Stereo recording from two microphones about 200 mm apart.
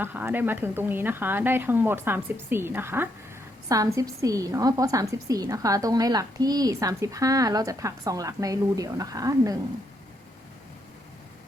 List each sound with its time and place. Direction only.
0.0 s a woman's voice: 10° right (ahead or behind)